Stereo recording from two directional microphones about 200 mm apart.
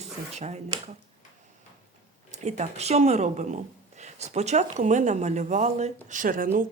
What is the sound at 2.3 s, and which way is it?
Speech, 35° right (ahead or behind).